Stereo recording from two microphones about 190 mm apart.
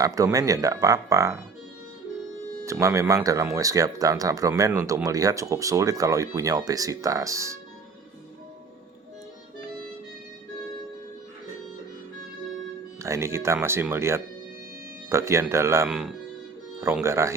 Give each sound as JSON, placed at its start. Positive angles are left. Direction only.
{"t": 0.0, "sound": "speech", "side_deg": -20}
{"t": 2.6, "sound": "speech", "side_deg": -15}
{"t": 13.0, "sound": "speech", "side_deg": -15}
{"t": 15.9, "sound": "speech", "side_deg": -5}